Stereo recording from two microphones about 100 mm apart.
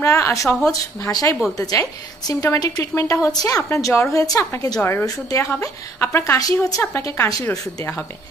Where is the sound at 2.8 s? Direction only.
25° left (ahead or behind).